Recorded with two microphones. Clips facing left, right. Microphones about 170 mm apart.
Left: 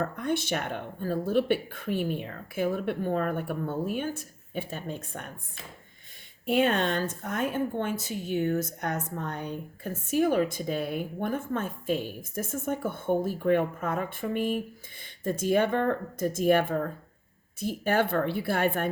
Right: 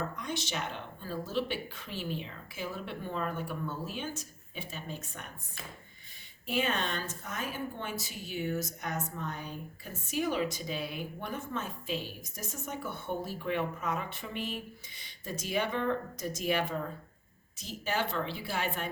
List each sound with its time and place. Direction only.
0.0 s speech: 55° left (ahead or behind)
6.5 s speech: 55° left (ahead or behind)